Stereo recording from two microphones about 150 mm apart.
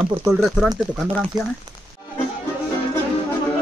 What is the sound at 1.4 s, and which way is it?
Speech, 30° right (ahead or behind).